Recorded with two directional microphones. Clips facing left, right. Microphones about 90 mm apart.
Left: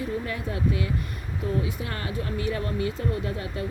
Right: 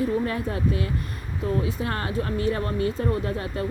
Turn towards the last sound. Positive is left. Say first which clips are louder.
# right 3 dB
turn(degrees=-40)  # may be behind; listen again after turning